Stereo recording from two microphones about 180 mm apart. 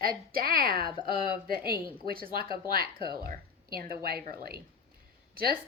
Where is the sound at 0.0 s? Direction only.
55° right (ahead or behind).